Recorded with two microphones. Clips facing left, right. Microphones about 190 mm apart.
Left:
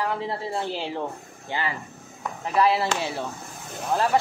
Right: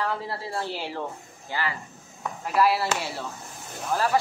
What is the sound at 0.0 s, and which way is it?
Speech, 20° left (ahead or behind).